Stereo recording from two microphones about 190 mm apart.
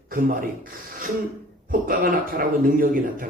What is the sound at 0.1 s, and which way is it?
A man's voice, 45° right (ahead or behind).